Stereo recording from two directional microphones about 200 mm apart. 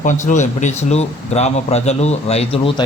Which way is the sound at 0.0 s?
40° left (ahead or behind).